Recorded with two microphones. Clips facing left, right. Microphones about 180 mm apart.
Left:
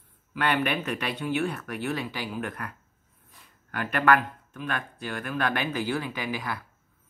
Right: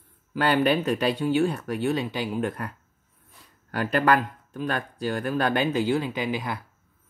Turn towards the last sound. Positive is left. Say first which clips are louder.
# right 4 dB
turn(degrees=-25)  # may be behind; listen again after turning